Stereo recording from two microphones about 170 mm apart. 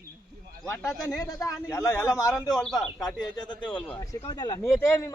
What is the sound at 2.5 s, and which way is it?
Speech, centre (ahead or behind).